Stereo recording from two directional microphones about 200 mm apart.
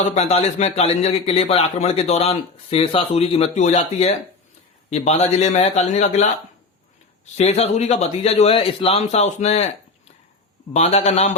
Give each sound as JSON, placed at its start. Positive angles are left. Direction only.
{"t": 0.0, "sound": "a man's voice", "side_deg": 35}
{"t": 7.3, "sound": "a man's voice", "side_deg": 30}
{"t": 10.8, "sound": "a man's voice", "side_deg": 35}